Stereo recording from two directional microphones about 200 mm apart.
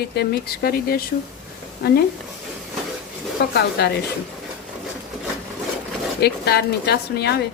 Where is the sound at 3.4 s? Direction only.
55° left (ahead or behind).